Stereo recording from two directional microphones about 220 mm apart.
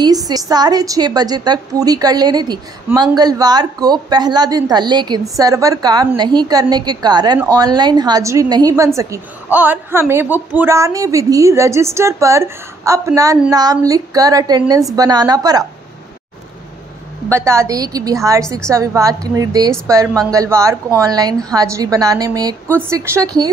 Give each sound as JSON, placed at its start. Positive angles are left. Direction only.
{"t": 0.0, "sound": "a woman's voice", "side_deg": -15}
{"t": 17.3, "sound": "a woman's voice", "side_deg": -10}